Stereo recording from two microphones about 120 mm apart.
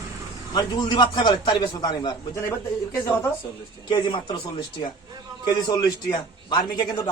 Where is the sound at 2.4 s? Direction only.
20° left (ahead or behind).